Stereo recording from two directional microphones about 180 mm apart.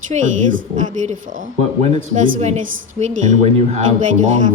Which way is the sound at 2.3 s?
40° right (ahead or behind).